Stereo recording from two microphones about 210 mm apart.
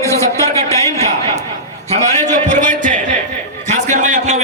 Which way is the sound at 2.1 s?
35° right (ahead or behind).